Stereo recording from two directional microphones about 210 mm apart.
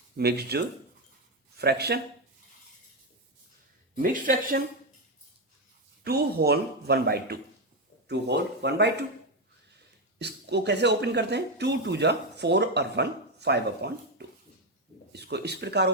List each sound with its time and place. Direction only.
0.2 s speech: 50° right (ahead or behind)
3.9 s speech: 40° right (ahead or behind)
6.1 s speech: 50° right (ahead or behind)
10.2 s speech: 55° right (ahead or behind)